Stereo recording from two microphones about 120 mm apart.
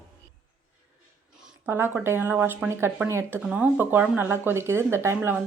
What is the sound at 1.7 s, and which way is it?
Speech, 20° right (ahead or behind).